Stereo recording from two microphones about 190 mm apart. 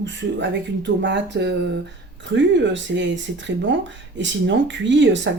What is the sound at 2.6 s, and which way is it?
Speech, 70° right (ahead or behind).